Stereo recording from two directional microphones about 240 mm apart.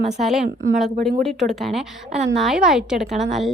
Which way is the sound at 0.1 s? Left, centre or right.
Centre.